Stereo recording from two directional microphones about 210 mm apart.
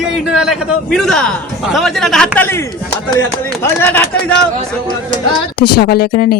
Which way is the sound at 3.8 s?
10° left (ahead or behind).